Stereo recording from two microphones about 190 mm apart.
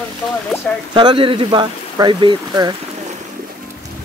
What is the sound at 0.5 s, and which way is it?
Speech, 15° left (ahead or behind).